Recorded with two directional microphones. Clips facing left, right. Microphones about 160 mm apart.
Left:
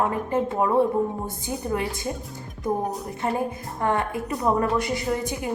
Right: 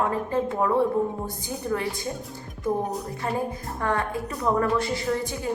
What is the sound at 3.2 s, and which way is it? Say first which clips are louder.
A woman's voice: left 3 dB; 20° left (ahead or behind).